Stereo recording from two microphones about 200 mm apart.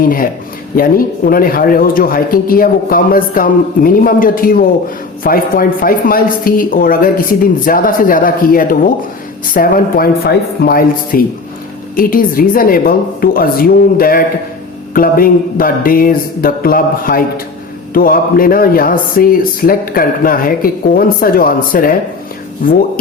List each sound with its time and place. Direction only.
0.0 s speech: 45° left (ahead or behind)